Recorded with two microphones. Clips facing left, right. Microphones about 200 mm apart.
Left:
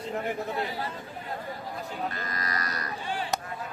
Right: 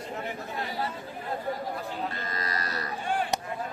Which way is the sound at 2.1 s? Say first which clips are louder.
Even; 25° right (ahead or behind).